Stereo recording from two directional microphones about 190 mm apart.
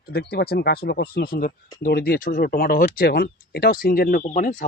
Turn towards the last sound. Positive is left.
turn(degrees=40)  # may be behind; listen again after turning